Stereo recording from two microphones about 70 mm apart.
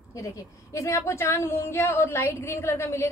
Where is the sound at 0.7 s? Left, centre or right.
Left.